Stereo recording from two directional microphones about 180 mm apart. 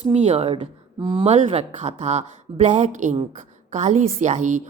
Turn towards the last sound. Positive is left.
turn(degrees=-40)  # may be behind; listen again after turning